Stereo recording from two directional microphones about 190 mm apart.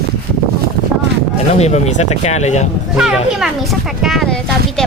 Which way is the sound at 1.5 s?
35° left (ahead or behind).